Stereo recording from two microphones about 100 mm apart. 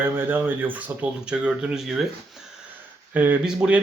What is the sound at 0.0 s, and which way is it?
Speech, 20° right (ahead or behind).